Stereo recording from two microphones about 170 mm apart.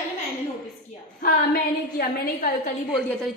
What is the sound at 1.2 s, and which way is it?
A woman's voice, 60° left (ahead or behind).